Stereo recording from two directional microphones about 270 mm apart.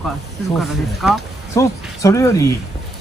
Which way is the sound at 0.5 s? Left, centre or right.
Centre.